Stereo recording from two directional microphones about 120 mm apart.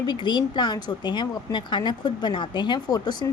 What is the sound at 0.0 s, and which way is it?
Speech, 40° left (ahead or behind).